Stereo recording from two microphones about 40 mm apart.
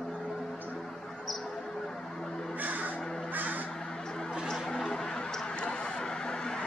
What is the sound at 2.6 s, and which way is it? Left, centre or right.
Crow, right.